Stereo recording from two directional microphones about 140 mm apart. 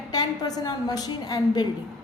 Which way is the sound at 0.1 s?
30° left (ahead or behind).